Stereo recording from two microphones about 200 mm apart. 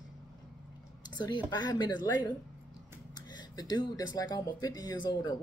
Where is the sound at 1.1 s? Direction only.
20° left (ahead or behind).